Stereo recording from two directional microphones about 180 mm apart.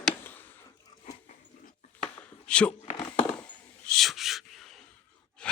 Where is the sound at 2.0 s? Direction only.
5° left (ahead or behind).